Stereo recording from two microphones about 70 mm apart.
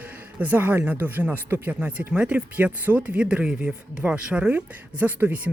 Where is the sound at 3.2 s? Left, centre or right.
Centre.